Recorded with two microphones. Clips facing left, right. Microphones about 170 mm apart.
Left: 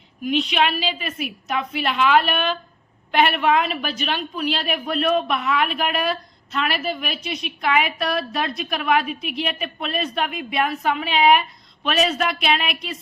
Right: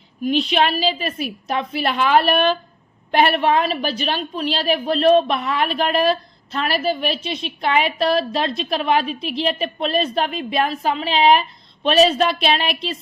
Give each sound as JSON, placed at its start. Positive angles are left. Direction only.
{"t": 0.3, "sound": "a woman's voice", "side_deg": -35}